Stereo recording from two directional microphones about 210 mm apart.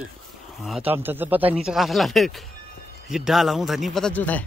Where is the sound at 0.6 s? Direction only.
5° right (ahead or behind).